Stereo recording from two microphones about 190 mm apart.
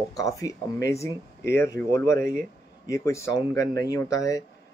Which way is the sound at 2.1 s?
50° right (ahead or behind).